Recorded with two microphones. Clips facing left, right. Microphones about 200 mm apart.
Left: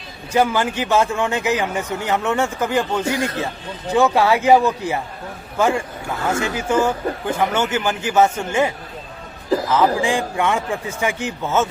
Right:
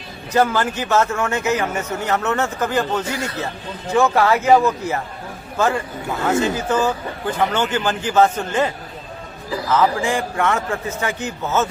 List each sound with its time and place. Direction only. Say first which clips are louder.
0.3 s a man's voice: even; 15° left (ahead or behind)
6.2 s a man's voice: right 3 dB; 20° right (ahead or behind)
6.6 s a man's voice: left 1 dB; 10° left (ahead or behind)
9.7 s a man's voice: right 2 dB; 15° left (ahead or behind)